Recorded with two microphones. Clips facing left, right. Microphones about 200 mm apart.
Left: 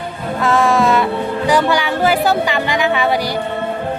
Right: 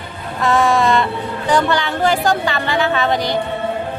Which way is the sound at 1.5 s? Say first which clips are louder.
Left 1 dB; 10° left (ahead or behind).